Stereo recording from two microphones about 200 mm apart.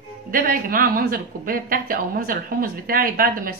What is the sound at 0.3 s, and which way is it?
A woman's voice, 45° right (ahead or behind).